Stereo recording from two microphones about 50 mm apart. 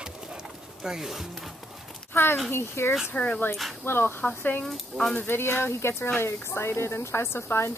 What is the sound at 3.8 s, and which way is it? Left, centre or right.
Speech, left.